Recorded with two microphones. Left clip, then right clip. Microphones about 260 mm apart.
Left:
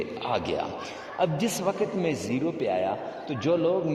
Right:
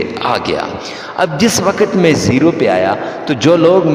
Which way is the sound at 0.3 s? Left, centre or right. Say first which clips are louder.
Right 12 dB; right.